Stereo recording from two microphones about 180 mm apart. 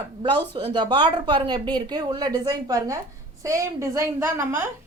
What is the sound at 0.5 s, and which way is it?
A woman's voice, 30° right (ahead or behind).